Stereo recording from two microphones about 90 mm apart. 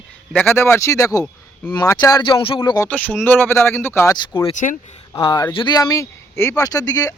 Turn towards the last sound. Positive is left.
turn(degrees=45)  # may be behind; listen again after turning